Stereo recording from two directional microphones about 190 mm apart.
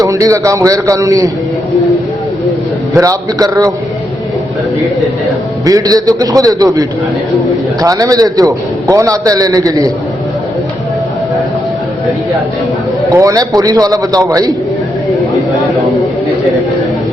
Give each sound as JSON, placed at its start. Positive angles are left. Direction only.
{"t": 0.0, "sound": "a man's voice", "side_deg": -15}
{"t": 3.0, "sound": "a man's voice", "side_deg": -20}
{"t": 5.6, "sound": "a man's voice", "side_deg": -20}
{"t": 13.1, "sound": "a man's voice", "side_deg": -20}